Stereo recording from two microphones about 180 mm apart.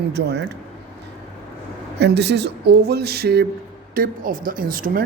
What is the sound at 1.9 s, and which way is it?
Speech, 70° right (ahead or behind).